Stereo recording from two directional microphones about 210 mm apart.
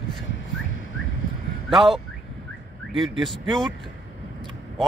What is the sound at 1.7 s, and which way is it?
Speech, centre (ahead or behind).